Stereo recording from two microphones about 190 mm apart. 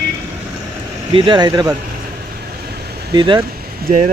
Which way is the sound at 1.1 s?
25° right (ahead or behind).